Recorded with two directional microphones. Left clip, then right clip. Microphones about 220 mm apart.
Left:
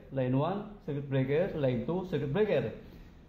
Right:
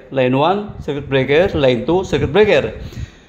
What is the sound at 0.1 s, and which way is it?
A man's voice, 45° right (ahead or behind).